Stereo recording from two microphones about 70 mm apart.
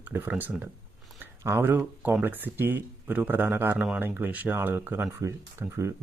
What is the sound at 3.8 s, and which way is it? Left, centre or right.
Speech, centre.